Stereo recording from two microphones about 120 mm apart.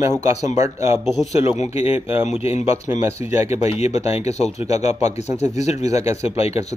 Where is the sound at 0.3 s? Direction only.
75° left (ahead or behind).